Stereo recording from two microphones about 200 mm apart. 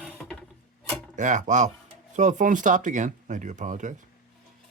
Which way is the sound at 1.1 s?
40° right (ahead or behind).